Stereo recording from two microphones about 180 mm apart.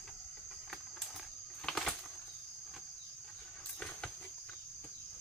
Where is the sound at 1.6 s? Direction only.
5° left (ahead or behind).